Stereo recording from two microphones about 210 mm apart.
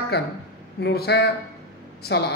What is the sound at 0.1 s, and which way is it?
A man's voice, 50° left (ahead or behind).